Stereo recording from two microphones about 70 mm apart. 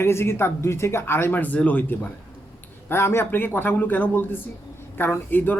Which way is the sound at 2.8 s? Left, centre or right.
Left.